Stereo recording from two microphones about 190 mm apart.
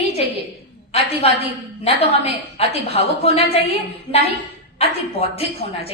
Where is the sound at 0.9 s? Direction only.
35° left (ahead or behind).